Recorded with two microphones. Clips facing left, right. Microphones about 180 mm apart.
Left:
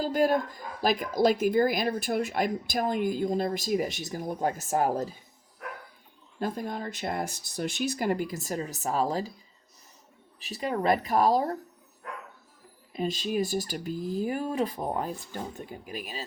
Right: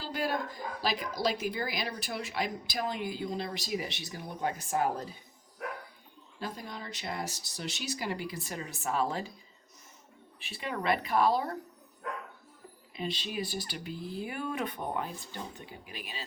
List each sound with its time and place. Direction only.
0.0 s speech: 45° left (ahead or behind)
6.4 s speech: 50° left (ahead or behind)
10.4 s speech: 40° left (ahead or behind)
12.9 s speech: 45° left (ahead or behind)